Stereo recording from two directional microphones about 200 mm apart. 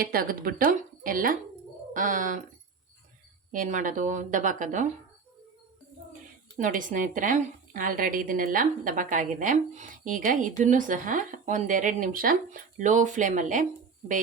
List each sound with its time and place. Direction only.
0.0 s a woman's voice: 45° right (ahead or behind)
3.5 s a woman's voice: 40° right (ahead or behind)
6.6 s a woman's voice: 40° right (ahead or behind)